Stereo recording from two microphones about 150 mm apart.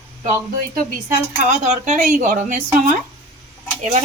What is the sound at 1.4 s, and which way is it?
A woman's voice, 50° right (ahead or behind).